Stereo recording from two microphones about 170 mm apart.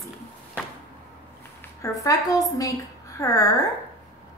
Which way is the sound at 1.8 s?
20° left (ahead or behind).